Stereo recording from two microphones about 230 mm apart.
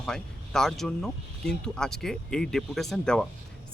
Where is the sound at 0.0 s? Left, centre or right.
Centre.